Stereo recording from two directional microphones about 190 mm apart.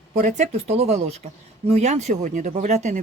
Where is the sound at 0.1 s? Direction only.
40° right (ahead or behind).